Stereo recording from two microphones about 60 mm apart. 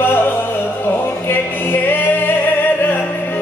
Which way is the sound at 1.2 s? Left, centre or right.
Left.